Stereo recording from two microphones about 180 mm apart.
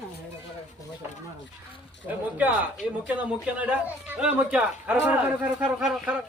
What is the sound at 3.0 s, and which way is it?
Speech, 10° right (ahead or behind).